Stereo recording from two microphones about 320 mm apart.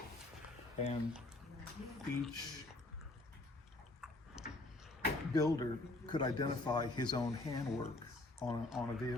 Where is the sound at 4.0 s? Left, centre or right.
Centre.